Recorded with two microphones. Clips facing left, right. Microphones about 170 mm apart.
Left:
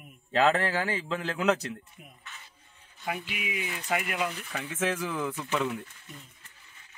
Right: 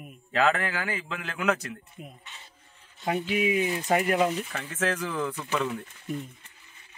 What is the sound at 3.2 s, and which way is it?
Speech, 40° right (ahead or behind).